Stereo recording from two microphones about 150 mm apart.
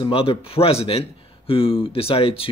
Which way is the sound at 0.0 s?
40° left (ahead or behind).